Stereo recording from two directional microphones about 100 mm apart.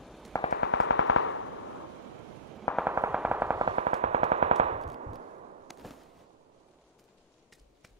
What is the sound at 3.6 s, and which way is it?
Machine gun, 90° right.